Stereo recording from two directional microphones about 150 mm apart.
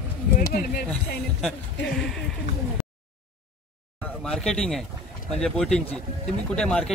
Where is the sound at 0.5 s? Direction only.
85° left.